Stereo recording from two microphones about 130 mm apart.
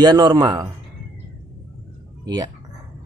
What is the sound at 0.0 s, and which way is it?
Speech, 30° right (ahead or behind).